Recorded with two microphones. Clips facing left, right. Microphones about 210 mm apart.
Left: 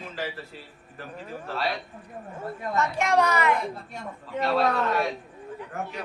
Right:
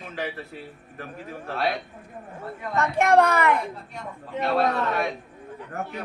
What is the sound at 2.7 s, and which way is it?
Speech, 55° right (ahead or behind).